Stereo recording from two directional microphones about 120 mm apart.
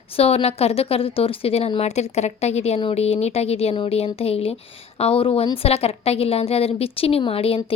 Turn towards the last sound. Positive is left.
turn(degrees=55)  # may be behind; listen again after turning